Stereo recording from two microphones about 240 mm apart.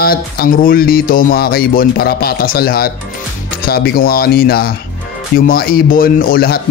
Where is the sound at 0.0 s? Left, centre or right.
Left.